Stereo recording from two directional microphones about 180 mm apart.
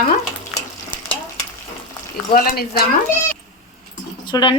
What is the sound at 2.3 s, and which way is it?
Speech, 55° left (ahead or behind).